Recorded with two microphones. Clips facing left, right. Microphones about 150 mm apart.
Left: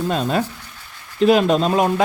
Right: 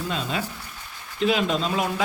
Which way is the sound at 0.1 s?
45° left (ahead or behind).